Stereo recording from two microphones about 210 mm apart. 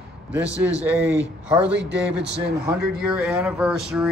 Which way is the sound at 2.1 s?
55° right (ahead or behind).